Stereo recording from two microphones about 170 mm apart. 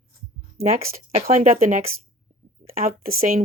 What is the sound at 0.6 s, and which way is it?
Speech, 65° right (ahead or behind).